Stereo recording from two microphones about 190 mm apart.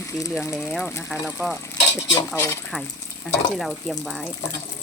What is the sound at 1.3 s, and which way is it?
Stir, 5° right (ahead or behind).